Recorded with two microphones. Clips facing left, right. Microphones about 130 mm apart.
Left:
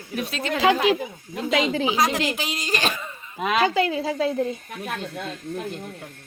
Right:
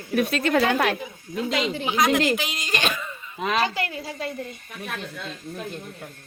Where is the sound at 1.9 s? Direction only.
35° left (ahead or behind).